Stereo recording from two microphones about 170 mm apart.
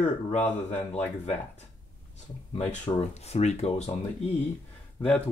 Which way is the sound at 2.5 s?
40° left (ahead or behind).